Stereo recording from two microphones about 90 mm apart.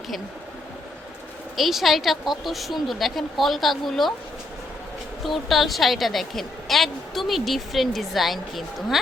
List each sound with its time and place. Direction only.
1.5 s a woman's voice: centre (ahead or behind)
5.2 s a woman's voice: centre (ahead or behind)